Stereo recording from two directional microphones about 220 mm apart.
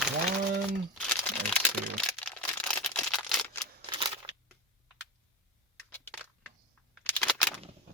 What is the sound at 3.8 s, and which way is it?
Scissors, 20° right (ahead or behind).